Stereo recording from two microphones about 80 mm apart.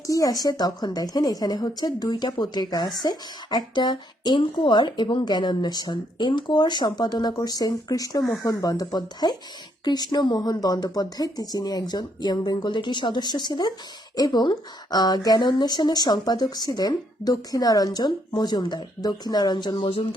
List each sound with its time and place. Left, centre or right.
0.1 s a woman's voice: left
14.4 s a woman's voice: left
19.0 s a woman's voice: left